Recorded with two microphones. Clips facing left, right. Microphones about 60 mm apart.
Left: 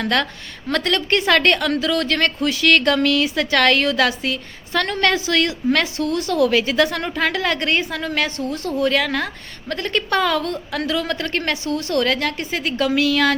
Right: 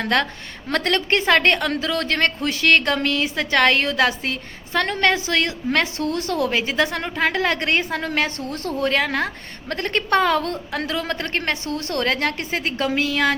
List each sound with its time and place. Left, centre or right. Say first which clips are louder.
0.0 s a woman's voice: even; right